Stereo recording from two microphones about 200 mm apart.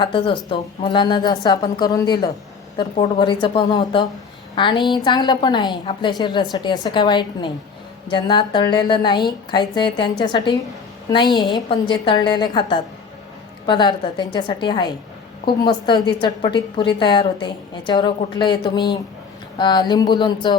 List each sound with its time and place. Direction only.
0.0 s a woman's voice: 25° left (ahead or behind)